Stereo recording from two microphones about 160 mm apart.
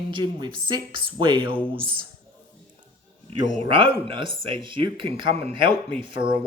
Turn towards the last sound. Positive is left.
turn(degrees=-30)  # may be behind; listen again after turning